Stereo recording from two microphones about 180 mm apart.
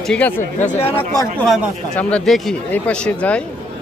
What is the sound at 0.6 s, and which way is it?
Speech, 35° left (ahead or behind).